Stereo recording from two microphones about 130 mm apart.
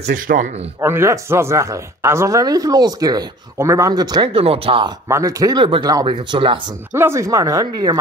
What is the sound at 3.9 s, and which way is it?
Speech, 35° right (ahead or behind).